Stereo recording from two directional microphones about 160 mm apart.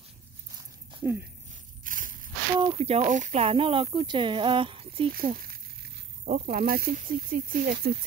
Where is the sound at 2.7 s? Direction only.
40° right (ahead or behind).